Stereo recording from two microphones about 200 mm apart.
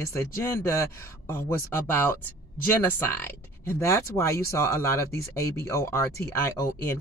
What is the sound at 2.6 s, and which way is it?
Speech, 10° left (ahead or behind).